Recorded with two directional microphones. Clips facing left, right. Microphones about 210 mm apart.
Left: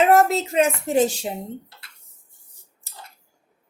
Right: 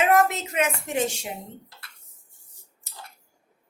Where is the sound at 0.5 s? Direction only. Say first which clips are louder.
Left 7 dB; 30° left (ahead or behind).